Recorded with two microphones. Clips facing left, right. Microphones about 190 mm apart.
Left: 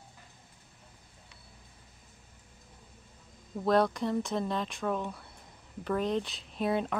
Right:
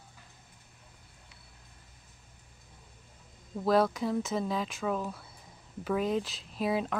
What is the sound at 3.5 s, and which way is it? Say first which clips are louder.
Speech: even; 5° right (ahead or behind).